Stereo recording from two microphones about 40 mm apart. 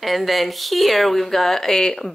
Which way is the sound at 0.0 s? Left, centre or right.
Centre.